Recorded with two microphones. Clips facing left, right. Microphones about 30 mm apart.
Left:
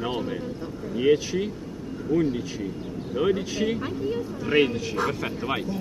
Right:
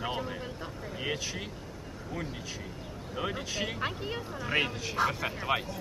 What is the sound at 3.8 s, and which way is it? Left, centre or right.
Speech, right.